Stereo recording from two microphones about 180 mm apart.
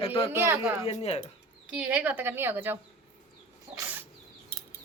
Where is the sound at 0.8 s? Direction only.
35° left (ahead or behind).